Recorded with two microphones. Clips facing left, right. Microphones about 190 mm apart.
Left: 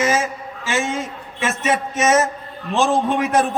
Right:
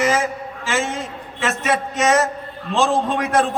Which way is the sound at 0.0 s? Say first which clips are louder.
Even; 20° left (ahead or behind).